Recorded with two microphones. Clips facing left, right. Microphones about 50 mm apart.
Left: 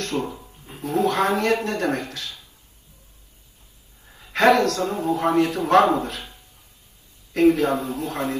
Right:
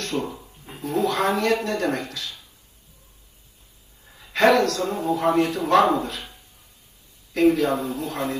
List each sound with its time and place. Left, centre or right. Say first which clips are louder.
0.0 s speech: left 1 dB; left
4.1 s a man's voice: left 1 dB; left